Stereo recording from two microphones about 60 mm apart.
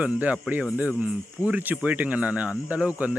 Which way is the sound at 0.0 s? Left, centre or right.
Right.